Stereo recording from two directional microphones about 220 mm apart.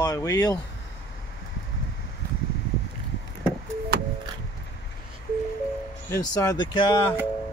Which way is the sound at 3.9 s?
45° right (ahead or behind).